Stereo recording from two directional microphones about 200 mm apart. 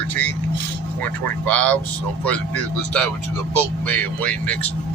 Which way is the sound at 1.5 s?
5° left (ahead or behind).